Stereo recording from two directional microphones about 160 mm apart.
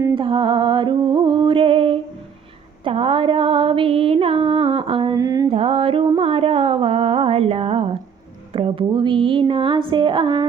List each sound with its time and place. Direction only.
0.1 s music: 30° right (ahead or behind)
5.1 s mantra: 20° right (ahead or behind)
5.5 s a sound: 35° right (ahead or behind)
8.5 s speech: 35° right (ahead or behind)